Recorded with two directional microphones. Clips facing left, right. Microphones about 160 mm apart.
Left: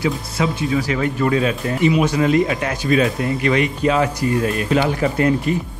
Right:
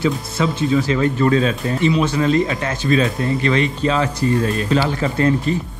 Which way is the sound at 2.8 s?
30° right (ahead or behind).